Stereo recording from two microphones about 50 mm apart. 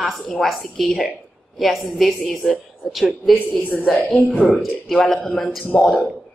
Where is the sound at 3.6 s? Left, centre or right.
Left.